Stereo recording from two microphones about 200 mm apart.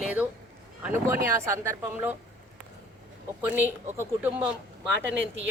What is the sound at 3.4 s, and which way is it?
Speech, 10° right (ahead or behind).